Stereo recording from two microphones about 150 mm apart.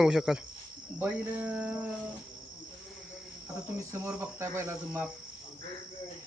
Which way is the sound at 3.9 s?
15° right (ahead or behind).